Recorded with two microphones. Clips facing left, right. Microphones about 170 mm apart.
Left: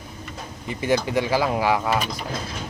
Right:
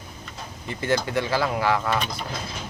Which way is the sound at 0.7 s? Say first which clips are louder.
Left 2 dB; 15° left (ahead or behind).